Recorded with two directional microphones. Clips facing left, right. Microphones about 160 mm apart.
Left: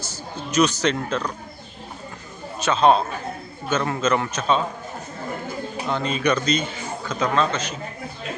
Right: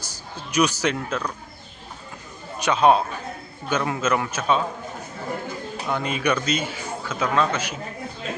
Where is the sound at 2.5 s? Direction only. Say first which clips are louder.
Even; 15° right (ahead or behind).